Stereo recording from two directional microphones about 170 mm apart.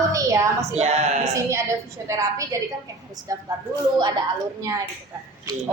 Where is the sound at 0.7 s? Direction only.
40° right (ahead or behind).